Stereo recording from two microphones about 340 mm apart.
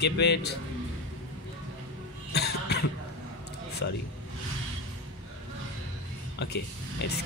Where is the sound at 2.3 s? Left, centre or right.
Left.